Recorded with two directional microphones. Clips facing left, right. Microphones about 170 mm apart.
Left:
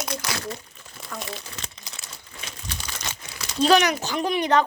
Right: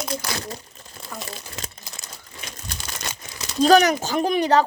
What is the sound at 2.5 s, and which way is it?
Crumpling, 45° right (ahead or behind).